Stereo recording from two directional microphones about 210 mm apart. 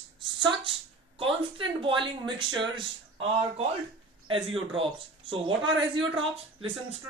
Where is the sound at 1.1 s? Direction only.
25° right (ahead or behind).